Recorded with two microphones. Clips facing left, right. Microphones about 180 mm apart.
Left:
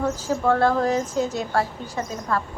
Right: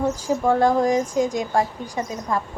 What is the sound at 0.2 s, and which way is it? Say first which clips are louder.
A woman's voice: right 1 dB; 15° right (ahead or behind).